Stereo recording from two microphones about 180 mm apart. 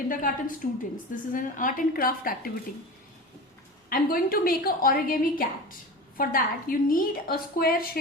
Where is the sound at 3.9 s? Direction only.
55° left (ahead or behind).